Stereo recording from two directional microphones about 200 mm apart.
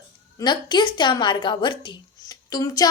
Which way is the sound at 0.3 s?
20° left (ahead or behind).